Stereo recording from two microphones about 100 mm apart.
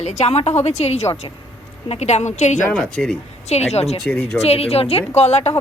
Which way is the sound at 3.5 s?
90° left.